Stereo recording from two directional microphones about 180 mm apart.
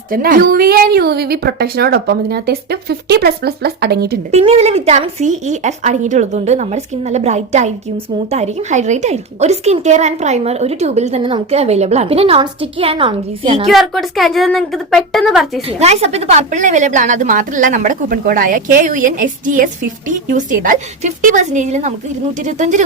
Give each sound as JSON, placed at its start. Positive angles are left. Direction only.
{"t": 0.1, "sound": "a woman's voice", "side_deg": -50}
{"t": 4.3, "sound": "a woman's voice", "side_deg": -35}
{"t": 13.7, "sound": "a woman's voice", "side_deg": 0}
{"t": 15.8, "sound": "a woman's voice", "side_deg": -35}